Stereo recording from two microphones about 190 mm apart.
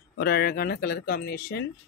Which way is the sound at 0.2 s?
55° left (ahead or behind).